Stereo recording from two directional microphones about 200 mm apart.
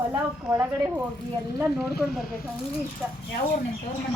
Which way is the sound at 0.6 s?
10° right (ahead or behind).